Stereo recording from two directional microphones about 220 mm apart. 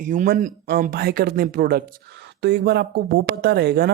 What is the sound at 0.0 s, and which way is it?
Speech, 35° right (ahead or behind).